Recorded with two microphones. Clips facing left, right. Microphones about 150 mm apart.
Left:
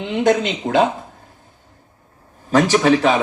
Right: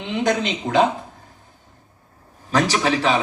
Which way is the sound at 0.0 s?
45° left (ahead or behind).